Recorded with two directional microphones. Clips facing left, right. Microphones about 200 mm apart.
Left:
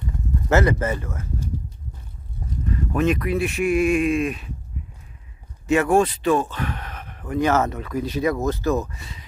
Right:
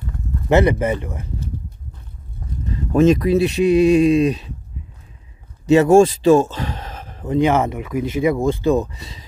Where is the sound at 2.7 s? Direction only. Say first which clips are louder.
Right 7 dB; 25° right (ahead or behind).